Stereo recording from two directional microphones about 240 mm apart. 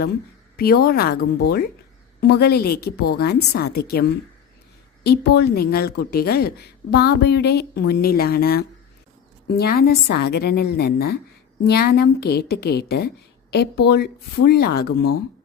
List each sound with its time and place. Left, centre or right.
0.5 s a woman's voice: left